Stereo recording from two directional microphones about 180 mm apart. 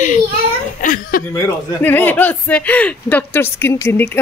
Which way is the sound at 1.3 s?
10° left (ahead or behind).